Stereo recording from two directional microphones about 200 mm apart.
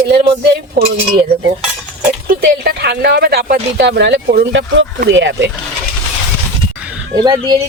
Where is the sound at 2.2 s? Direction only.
50° right (ahead or behind).